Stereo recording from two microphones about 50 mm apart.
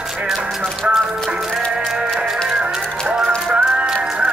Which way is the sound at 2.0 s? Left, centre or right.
Centre.